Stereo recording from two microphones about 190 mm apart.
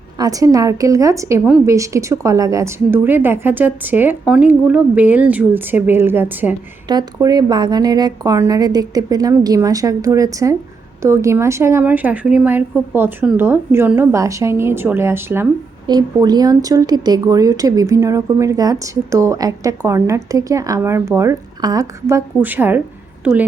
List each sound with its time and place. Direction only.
0.2 s a woman's voice: 20° right (ahead or behind)
6.8 s a woman's voice: 20° right (ahead or behind)